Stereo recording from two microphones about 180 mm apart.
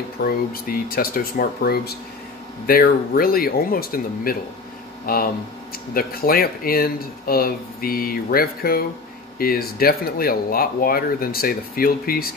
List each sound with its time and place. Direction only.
0.2 s speech: 55° left (ahead or behind)